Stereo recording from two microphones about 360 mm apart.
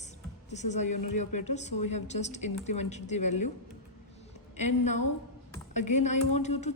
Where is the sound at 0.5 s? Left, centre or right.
Centre.